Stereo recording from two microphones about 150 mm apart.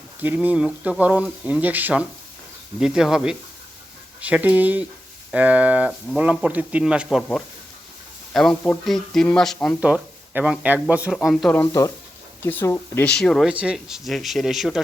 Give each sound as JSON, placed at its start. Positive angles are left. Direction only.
{"t": 0.2, "sound": "speech", "side_deg": -10}
{"t": 7.2, "sound": "speech", "side_deg": 5}
{"t": 9.8, "sound": "speech", "side_deg": -10}
{"t": 11.5, "sound": "speech", "side_deg": 20}
{"t": 13.1, "sound": "speech", "side_deg": 5}
{"t": 13.5, "sound": "speech", "side_deg": -5}